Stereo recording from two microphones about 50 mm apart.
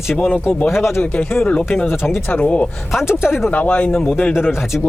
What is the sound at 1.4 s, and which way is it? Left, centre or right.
Speech, left.